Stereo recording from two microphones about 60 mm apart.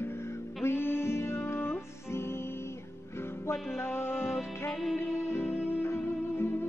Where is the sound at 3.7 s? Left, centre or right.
Left.